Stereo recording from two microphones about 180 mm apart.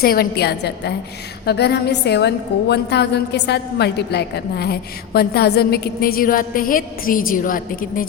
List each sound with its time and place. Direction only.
0.0 s a woman's voice: 60° left (ahead or behind)